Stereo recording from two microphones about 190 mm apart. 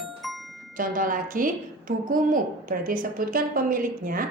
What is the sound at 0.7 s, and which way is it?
A woman's voice, 45° right (ahead or behind).